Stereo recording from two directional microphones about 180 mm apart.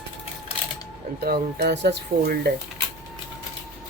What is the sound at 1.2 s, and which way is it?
Speech, 60° right (ahead or behind).